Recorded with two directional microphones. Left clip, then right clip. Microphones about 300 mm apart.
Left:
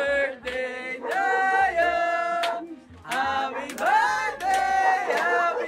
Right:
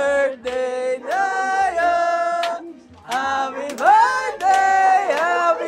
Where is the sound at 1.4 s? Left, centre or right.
Centre.